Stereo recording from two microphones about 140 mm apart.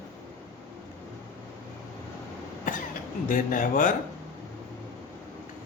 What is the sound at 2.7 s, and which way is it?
Cough, 65° left (ahead or behind).